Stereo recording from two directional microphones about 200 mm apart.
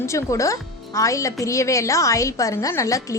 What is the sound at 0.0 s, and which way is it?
A woman's voice, 15° left (ahead or behind).